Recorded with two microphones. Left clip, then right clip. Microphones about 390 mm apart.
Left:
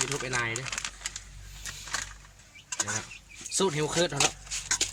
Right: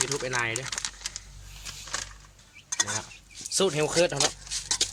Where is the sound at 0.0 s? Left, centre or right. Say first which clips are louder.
Right 2 dB; centre.